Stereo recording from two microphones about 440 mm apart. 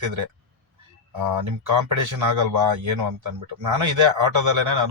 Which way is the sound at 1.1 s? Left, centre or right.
Right.